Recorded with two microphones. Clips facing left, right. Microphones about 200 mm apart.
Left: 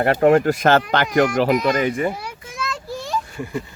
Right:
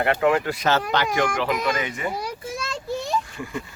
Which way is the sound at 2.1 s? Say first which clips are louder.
Right 2 dB; 35° right (ahead or behind).